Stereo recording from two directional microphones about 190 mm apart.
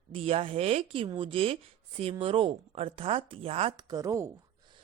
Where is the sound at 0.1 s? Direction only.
30° right (ahead or behind).